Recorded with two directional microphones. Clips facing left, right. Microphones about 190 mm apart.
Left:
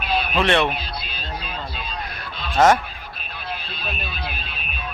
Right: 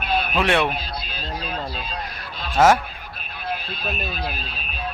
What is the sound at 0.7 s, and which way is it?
Music, 40° right (ahead or behind).